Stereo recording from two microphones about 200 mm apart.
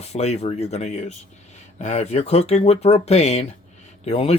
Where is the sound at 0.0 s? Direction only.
35° left (ahead or behind).